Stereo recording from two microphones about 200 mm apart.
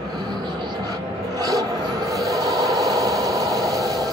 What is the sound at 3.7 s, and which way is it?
Vehicle, 15° right (ahead or behind).